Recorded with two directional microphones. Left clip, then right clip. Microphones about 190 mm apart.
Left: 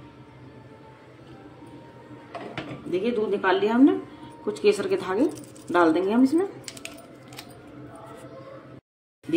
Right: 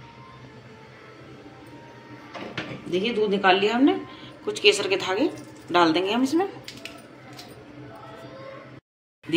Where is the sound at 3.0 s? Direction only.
50° left (ahead or behind).